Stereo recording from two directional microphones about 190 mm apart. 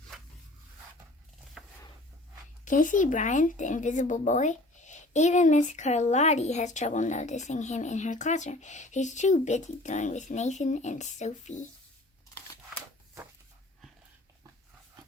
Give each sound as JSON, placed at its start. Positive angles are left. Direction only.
{"t": 0.1, "sound": "zipper", "side_deg": 0}
{"t": 1.6, "sound": "chopping", "side_deg": 0}
{"t": 2.6, "sound": "speech", "side_deg": 45}